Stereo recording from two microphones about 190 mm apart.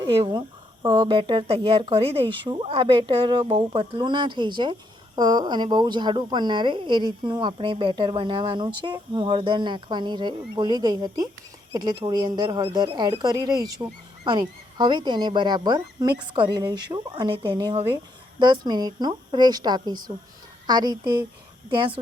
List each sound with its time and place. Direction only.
0.0 s speech: 25° right (ahead or behind)